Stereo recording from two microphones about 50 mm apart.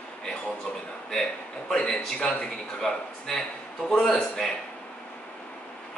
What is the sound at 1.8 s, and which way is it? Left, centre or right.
A man's voice, left.